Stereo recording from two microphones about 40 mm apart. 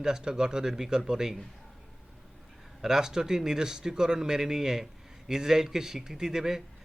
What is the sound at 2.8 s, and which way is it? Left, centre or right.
A man's voice, centre.